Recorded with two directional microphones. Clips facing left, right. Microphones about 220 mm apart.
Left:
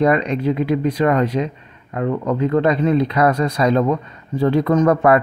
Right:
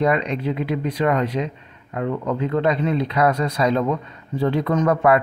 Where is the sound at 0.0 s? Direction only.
45° left (ahead or behind).